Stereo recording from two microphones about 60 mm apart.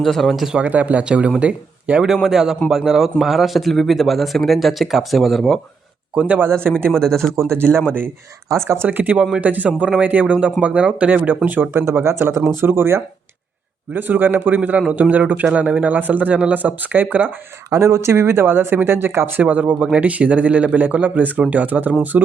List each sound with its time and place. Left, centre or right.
0.0 s speech: centre
0.5 s speech: right
2.2 s a man's voice: centre
6.1 s speech: right
6.4 s speech: right
7.0 s speech: centre
7.3 s a man's voice: right
8.9 s speech: right
11.7 s speech: right
17.7 s a man's voice: right
19.4 s speech: right